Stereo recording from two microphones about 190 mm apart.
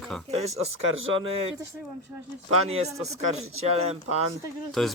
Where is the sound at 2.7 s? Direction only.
35° right (ahead or behind).